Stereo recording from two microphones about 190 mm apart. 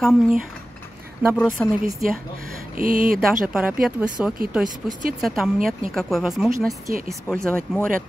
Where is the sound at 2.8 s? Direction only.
45° right (ahead or behind).